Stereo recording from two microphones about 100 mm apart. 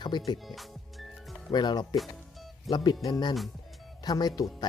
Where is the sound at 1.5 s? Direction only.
50° left (ahead or behind).